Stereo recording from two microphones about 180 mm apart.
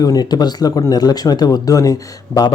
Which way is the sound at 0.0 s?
20° left (ahead or behind).